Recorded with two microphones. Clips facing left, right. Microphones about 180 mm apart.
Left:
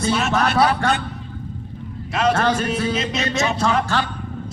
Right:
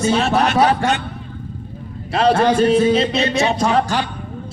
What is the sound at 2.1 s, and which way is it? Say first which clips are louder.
A man's voice: right 5 dB; 35° right (ahead or behind).